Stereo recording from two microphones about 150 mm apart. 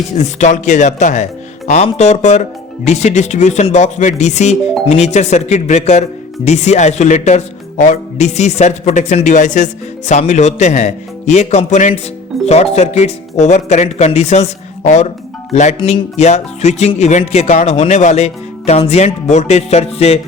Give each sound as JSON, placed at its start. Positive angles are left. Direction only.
{"t": 0.2, "sound": "speech", "side_deg": 50}